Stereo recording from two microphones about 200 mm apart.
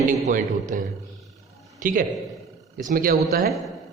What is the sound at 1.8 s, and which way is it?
A man's voice, 45° right (ahead or behind).